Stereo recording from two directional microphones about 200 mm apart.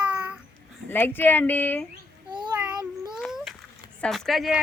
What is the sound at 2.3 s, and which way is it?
Child singing, 20° right (ahead or behind).